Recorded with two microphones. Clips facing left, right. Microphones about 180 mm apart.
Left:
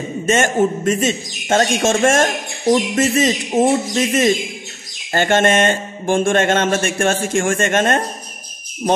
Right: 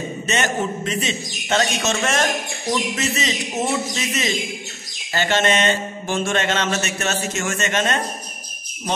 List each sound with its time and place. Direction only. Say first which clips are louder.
0.3 s speech: left 8 dB; 50° left (ahead or behind)